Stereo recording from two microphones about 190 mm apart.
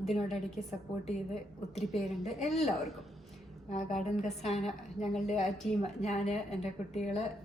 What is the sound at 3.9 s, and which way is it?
Speech, 40° left (ahead or behind).